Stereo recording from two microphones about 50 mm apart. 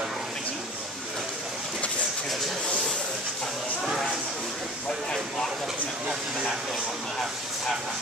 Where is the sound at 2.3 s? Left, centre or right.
Centre.